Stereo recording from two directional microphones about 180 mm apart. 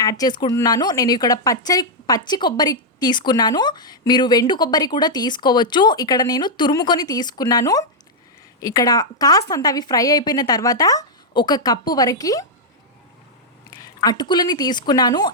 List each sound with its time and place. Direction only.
0.0 s speech: 20° left (ahead or behind)
13.8 s speech: 20° left (ahead or behind)